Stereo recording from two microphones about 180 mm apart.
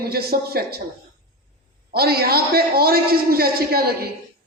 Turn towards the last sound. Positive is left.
turn(degrees=-60)  # may be behind; listen again after turning